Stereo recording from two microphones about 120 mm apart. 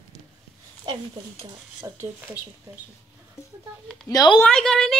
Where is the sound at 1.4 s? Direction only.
25° right (ahead or behind).